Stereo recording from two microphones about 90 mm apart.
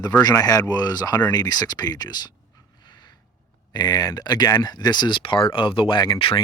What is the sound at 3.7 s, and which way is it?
Speech, 50° left (ahead or behind).